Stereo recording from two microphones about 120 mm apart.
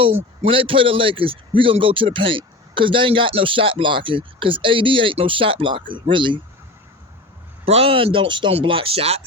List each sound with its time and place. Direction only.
0.4 s a man's voice: 50° right (ahead or behind)
7.6 s a man's voice: 55° right (ahead or behind)